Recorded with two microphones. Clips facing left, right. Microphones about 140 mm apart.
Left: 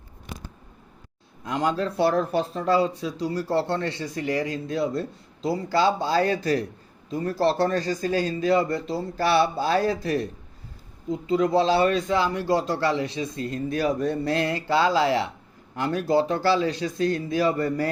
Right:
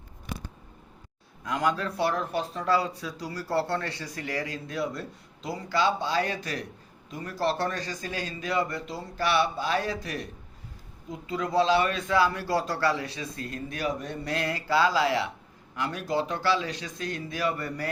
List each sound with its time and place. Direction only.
1.5 s speech: 30° left (ahead or behind)